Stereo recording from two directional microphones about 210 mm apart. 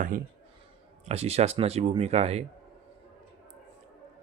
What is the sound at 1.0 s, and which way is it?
Speech, 30° right (ahead or behind).